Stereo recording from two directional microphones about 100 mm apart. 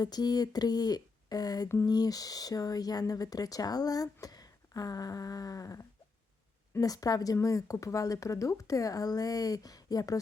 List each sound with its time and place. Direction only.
0.0 s speech: 40° left (ahead or behind)
1.6 s a sound: 30° left (ahead or behind)
1.9 s speech: 40° left (ahead or behind)